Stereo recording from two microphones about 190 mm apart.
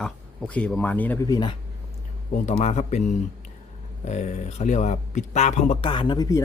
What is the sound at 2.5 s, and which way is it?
Speech, 35° left (ahead or behind).